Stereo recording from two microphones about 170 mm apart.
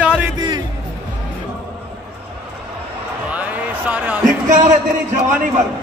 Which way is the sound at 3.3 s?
10° right (ahead or behind).